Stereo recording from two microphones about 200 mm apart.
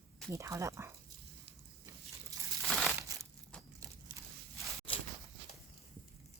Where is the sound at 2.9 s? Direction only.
15° right (ahead or behind).